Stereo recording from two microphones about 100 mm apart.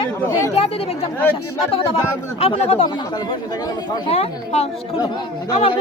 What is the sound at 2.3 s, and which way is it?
Speech, 90° left.